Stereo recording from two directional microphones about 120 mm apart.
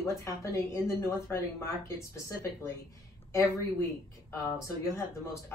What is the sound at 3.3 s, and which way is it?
Speech, 25° left (ahead or behind).